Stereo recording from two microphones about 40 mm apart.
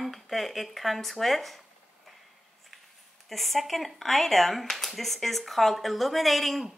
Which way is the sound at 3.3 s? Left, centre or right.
Centre.